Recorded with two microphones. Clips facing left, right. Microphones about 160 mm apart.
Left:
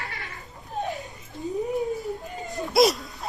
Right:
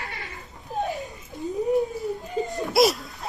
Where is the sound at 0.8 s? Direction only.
Centre (ahead or behind).